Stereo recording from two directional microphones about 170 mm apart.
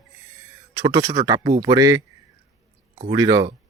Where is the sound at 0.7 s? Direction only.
25° right (ahead or behind).